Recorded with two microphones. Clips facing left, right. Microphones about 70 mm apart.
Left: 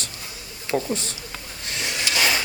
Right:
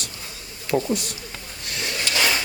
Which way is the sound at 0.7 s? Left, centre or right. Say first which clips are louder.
Right 2 dB; centre.